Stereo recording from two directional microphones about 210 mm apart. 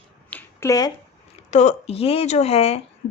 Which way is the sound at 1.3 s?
30° left (ahead or behind).